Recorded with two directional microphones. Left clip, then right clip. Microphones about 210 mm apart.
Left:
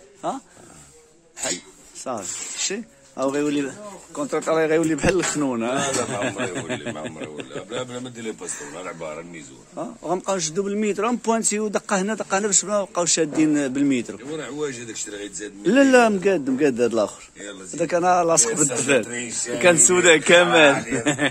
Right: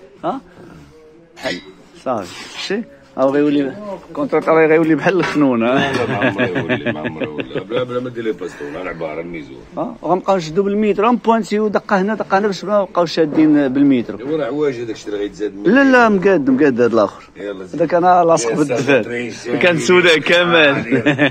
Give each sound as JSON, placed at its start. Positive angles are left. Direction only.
{"t": 0.2, "sound": "speech", "side_deg": 20}
{"t": 2.1, "sound": "speech", "side_deg": 20}
{"t": 4.4, "sound": "speech", "side_deg": 25}
{"t": 9.8, "sound": "speech", "side_deg": 35}
{"t": 15.7, "sound": "speech", "side_deg": 25}
{"t": 17.4, "sound": "speech", "side_deg": 40}
{"t": 19.0, "sound": "speech", "side_deg": 35}
{"t": 19.6, "sound": "speech", "side_deg": 0}